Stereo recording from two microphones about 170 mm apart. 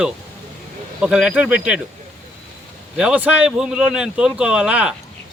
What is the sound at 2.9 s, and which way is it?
A man's voice, 5° right (ahead or behind).